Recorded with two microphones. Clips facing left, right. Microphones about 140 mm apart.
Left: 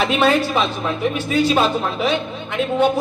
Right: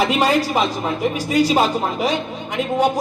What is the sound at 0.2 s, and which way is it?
A man's voice, 10° right (ahead or behind).